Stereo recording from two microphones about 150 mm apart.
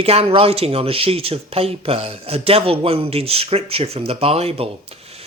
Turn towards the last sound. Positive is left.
turn(degrees=-40)  # may be behind; listen again after turning